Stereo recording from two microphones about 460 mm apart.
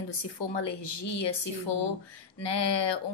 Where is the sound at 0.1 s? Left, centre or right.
Left.